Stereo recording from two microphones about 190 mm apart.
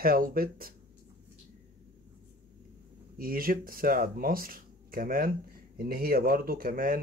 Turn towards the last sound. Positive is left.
turn(degrees=-45)  # may be behind; listen again after turning